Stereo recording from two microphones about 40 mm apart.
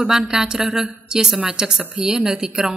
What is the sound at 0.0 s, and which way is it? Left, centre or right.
Speech, centre.